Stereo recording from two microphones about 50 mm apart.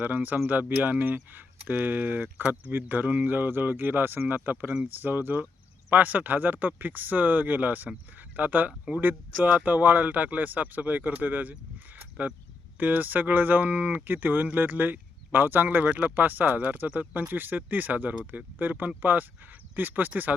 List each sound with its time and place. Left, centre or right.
0.0 s speech: right